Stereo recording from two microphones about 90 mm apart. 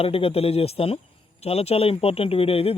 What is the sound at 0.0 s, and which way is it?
Speech, 90° left.